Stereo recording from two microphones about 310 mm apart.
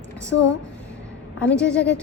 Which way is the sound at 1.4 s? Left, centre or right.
Centre.